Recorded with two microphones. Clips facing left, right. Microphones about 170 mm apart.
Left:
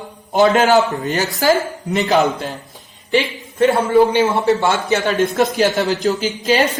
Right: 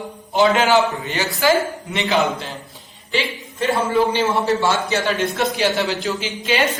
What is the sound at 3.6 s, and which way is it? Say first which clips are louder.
A man's voice: left 6 dB; 55° left (ahead or behind).